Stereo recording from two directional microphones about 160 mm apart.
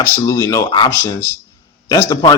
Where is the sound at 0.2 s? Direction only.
20° left (ahead or behind).